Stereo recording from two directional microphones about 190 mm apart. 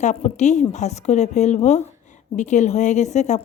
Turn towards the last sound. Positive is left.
turn(degrees=40)  # may be behind; listen again after turning